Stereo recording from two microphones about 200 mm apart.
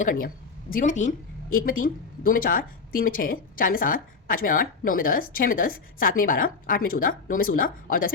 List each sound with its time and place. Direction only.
0.0 s a woman's voice: 40° left (ahead or behind)